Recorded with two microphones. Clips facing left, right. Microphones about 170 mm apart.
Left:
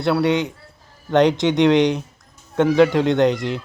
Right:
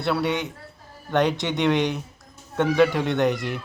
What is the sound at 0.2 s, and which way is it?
Speech, 90° left.